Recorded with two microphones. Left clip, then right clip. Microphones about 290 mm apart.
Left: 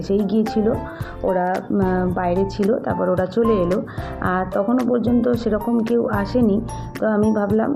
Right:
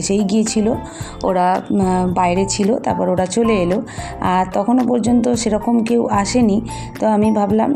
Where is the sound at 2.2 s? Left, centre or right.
Centre.